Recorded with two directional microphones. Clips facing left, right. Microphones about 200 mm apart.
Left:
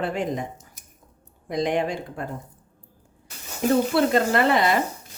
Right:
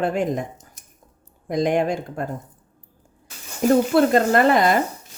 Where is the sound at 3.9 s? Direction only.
45° right (ahead or behind).